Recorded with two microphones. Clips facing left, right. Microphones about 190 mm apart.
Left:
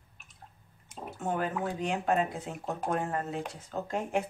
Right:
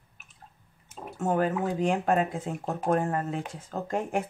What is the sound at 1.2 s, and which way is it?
Speech, 45° right (ahead or behind).